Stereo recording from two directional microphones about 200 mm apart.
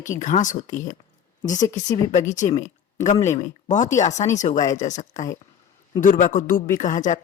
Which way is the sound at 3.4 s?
40° left (ahead or behind).